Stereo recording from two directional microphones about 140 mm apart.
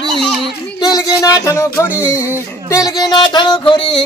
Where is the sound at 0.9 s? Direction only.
25° left (ahead or behind).